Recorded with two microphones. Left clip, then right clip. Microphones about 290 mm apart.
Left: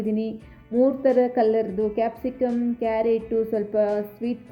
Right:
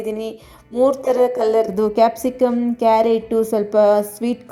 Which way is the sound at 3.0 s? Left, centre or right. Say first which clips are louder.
Right 5 dB; centre.